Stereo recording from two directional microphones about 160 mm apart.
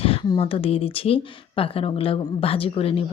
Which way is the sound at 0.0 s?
35° left (ahead or behind).